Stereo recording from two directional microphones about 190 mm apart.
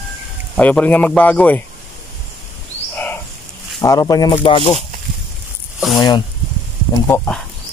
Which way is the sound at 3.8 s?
20° left (ahead or behind).